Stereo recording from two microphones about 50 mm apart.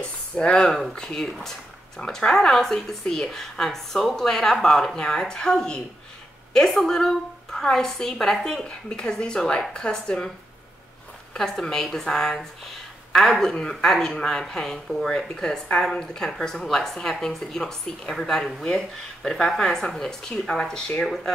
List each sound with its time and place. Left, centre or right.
0.0 s a sound: centre
0.9 s speech: centre
8.6 s speech: centre
11.3 s speech: centre